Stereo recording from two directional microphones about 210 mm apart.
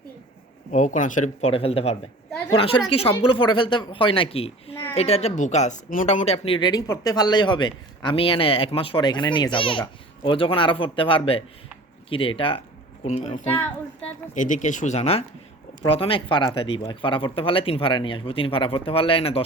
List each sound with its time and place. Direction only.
0.7 s speech: 35° left (ahead or behind)